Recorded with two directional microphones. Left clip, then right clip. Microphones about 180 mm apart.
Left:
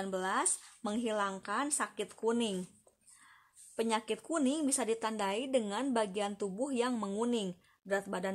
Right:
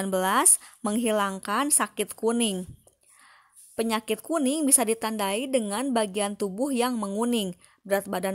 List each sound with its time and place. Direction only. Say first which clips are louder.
0.0 s a woman's voice: right 10 dB; 45° right (ahead or behind)